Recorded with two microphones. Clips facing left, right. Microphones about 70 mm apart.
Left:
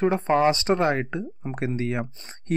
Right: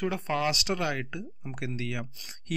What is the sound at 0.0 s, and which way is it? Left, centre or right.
Speech, left.